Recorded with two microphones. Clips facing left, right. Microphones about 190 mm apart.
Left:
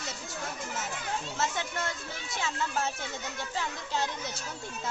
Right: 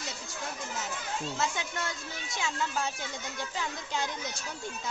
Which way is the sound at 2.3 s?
Centre (ahead or behind).